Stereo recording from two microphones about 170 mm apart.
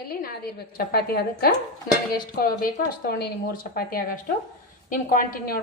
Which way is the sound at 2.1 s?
60° left (ahead or behind).